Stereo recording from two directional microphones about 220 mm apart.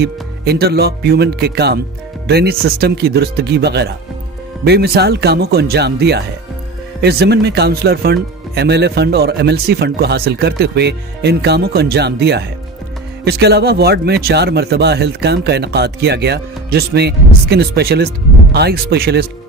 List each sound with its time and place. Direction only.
0.0 s speech: 45° right (ahead or behind)